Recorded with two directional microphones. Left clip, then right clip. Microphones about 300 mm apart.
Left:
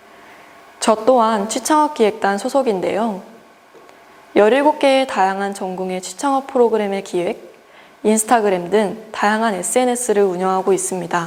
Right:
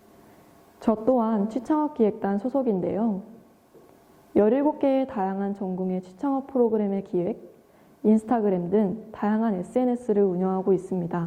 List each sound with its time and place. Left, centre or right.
0.8 s a woman's voice: centre
4.4 s a woman's voice: centre
5.6 s a woman's voice: left
5.9 s a woman's voice: centre